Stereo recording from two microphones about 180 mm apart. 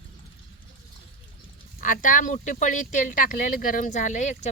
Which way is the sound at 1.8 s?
45° left (ahead or behind).